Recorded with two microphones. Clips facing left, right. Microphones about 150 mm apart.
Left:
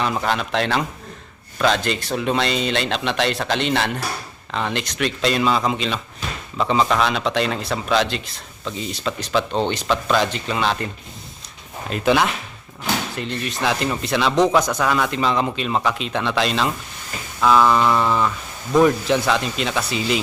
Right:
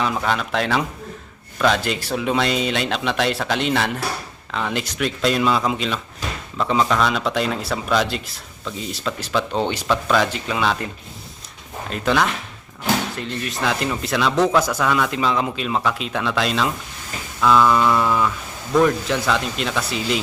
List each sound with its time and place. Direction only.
0.0 s speech: centre (ahead or behind)
11.9 s speech: 5° left (ahead or behind)